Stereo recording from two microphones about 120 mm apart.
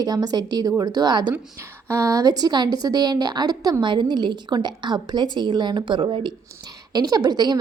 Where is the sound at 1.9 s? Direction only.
25° right (ahead or behind).